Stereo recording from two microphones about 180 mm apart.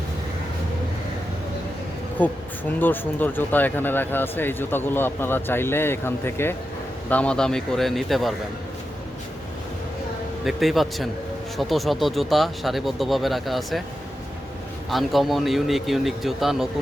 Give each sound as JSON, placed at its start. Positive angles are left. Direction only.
{"t": 2.2, "sound": "speech", "side_deg": 10}
{"t": 10.4, "sound": "speech", "side_deg": 0}
{"t": 14.8, "sound": "speech", "side_deg": 0}